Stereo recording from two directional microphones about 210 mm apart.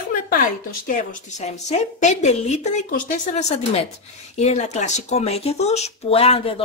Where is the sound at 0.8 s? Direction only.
40° left (ahead or behind).